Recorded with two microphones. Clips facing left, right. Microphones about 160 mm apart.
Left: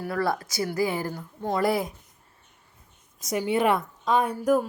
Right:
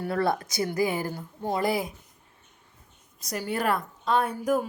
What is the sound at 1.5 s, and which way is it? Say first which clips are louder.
Speech: left 2 dB; centre (ahead or behind).